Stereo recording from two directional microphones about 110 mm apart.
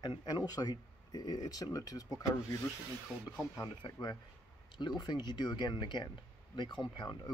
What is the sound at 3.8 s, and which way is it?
Speech, 45° left (ahead or behind).